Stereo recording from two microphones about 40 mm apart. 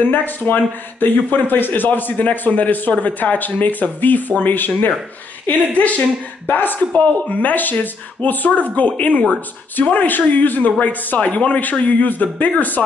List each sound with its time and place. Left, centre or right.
0.0 s speech: left
5.5 s speech: left
6.9 s speech: left
8.7 s speech: left
11.1 s speech: left